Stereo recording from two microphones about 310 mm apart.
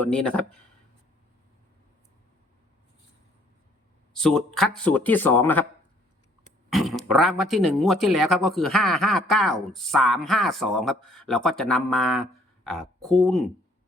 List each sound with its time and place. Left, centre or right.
0.0 s speech: centre
4.1 s speech: centre
6.7 s speech: centre